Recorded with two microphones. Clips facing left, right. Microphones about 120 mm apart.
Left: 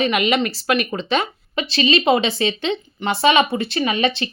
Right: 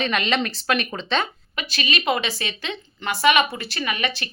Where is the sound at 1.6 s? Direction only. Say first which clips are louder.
Left 9 dB; 25° left (ahead or behind).